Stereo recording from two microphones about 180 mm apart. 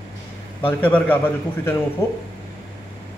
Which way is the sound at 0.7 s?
10° left (ahead or behind).